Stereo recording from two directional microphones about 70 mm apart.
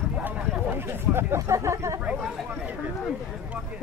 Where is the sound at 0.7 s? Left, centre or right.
Right.